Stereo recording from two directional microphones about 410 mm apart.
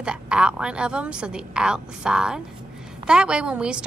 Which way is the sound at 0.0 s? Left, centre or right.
Centre.